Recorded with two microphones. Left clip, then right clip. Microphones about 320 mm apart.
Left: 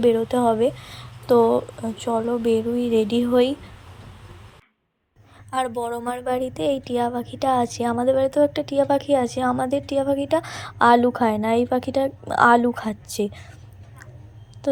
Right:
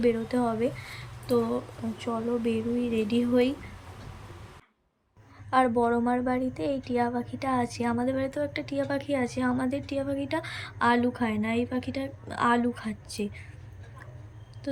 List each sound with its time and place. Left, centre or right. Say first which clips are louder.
0.0 s a woman's voice: left 8 dB; centre
5.5 s a woman's voice: right 1 dB; left
14.6 s a sound: left 12 dB; centre